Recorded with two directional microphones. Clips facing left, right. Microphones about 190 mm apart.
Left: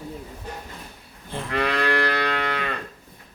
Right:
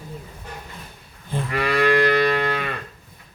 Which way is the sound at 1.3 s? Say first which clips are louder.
Right 2 dB; 10° right (ahead or behind).